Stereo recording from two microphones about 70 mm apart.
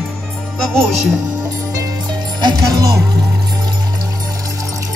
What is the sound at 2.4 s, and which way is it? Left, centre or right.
Music, right.